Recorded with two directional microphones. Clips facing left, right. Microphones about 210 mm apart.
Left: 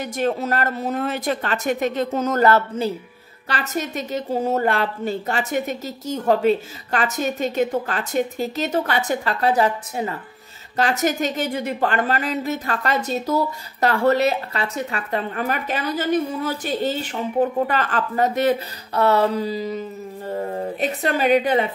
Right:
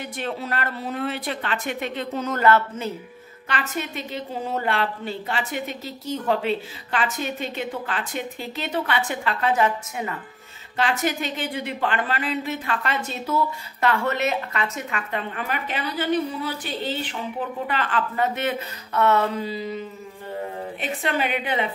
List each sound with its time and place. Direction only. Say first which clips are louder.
0.0 s a woman's voice: left 7 dB; 45° left (ahead or behind)
20.8 s a woman's voice: left 4 dB; 40° left (ahead or behind)